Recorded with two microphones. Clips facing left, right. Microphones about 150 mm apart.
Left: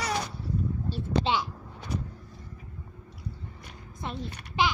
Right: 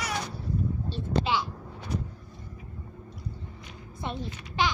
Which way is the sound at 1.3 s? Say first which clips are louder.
Left 1 dB; 25° left (ahead or behind).